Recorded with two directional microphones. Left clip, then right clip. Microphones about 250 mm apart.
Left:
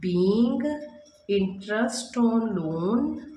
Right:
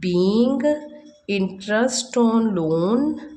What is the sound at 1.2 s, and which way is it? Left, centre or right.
Speech, right.